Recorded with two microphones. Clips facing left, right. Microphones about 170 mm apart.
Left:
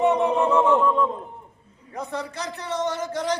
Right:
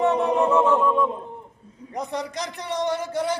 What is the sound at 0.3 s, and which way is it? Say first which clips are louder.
A man's voice: even; 15° right (ahead or behind).